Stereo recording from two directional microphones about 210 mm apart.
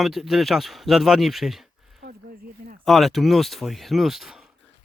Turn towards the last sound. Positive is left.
turn(degrees=0)  # may be behind; listen again after turning